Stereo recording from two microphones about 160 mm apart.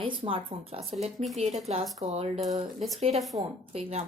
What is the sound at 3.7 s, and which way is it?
Speech, 40° right (ahead or behind).